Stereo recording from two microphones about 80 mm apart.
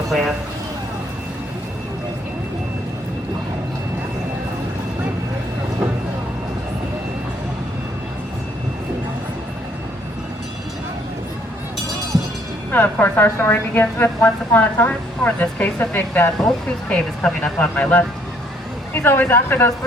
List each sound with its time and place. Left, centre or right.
0.1 s speech: centre
12.7 s a woman's voice: left
19.0 s a woman's voice: left